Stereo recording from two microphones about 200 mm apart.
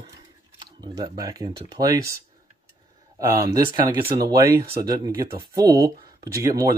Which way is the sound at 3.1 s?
15° right (ahead or behind).